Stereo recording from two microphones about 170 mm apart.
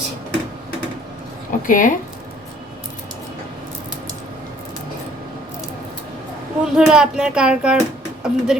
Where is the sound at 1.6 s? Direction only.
50° left (ahead or behind).